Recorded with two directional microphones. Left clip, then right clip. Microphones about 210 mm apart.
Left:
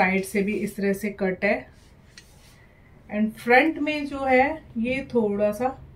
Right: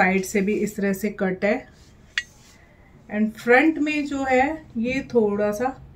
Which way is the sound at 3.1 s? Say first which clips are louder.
Right 2 dB; 5° right (ahead or behind).